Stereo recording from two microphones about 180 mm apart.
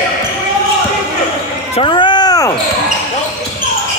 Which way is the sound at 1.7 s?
30° left (ahead or behind).